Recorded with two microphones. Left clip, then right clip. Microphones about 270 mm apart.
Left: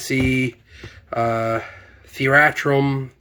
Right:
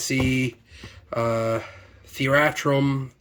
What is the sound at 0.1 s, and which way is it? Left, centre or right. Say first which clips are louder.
Speech: left 5 dB; centre.